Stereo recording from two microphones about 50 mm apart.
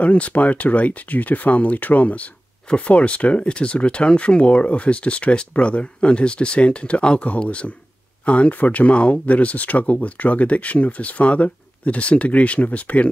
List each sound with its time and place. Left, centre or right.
0.0 s speech: left